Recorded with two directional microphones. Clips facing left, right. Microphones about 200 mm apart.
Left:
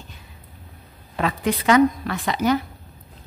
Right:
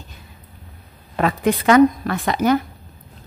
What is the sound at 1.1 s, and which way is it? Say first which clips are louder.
Speech: right 4 dB; 50° right (ahead or behind).